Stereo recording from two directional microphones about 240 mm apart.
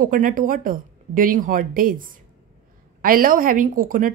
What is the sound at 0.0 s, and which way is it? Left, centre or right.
Speech, right.